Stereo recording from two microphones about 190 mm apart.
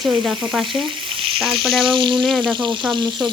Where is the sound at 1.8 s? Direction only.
25° right (ahead or behind).